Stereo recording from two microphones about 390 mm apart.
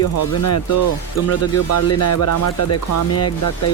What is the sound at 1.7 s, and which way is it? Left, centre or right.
Speech, left.